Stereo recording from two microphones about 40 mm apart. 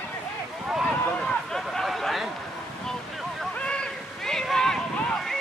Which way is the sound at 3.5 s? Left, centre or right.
Left.